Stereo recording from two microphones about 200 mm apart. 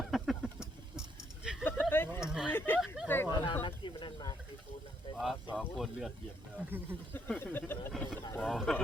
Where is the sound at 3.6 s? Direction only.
25° left (ahead or behind).